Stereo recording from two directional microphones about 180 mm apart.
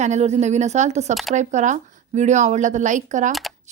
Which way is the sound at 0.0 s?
40° right (ahead or behind).